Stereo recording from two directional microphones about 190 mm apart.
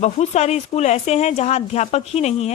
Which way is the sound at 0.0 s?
35° left (ahead or behind).